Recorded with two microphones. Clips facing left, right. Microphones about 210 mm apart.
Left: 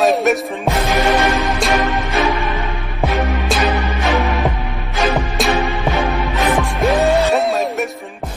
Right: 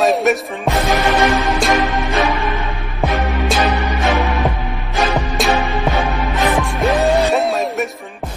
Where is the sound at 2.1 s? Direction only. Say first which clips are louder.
Even; centre (ahead or behind).